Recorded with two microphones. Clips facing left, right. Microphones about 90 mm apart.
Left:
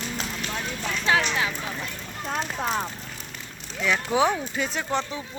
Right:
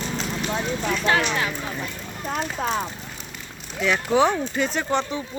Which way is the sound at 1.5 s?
10° right (ahead or behind).